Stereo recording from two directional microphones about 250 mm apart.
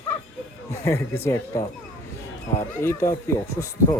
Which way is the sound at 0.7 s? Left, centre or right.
Centre.